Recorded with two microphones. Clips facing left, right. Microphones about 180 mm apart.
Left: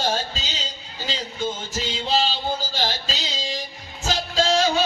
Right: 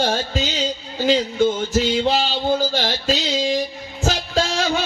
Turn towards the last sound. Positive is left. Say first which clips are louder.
# left 1 dB
turn(degrees=-55)  # may be behind; listen again after turning